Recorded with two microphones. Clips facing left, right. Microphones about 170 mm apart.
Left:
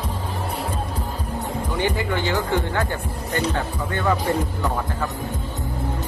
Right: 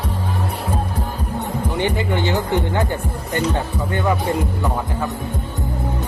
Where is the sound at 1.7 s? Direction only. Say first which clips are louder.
Right 2 dB; 20° right (ahead or behind).